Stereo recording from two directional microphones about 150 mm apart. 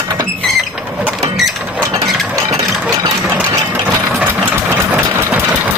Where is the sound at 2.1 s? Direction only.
Centre (ahead or behind).